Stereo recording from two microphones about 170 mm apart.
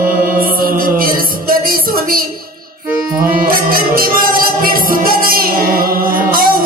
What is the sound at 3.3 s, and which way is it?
Music, 60° right (ahead or behind).